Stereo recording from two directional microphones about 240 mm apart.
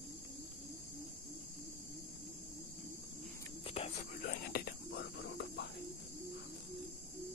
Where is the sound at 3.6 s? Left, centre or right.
Left.